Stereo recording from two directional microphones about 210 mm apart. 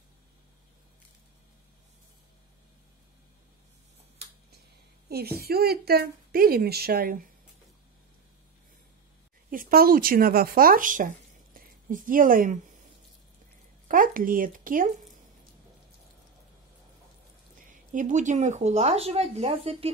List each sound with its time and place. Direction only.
5.1 s a woman's voice: 45° right (ahead or behind)
9.5 s speech: 45° right (ahead or behind)
13.8 s speech: 40° right (ahead or behind)
17.6 s speech: 40° right (ahead or behind)